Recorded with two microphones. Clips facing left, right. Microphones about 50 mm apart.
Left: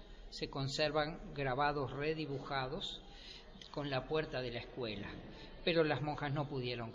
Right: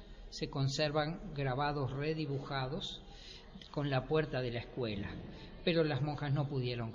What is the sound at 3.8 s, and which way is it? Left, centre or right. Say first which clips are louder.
A man's voice: right 4 dB; centre.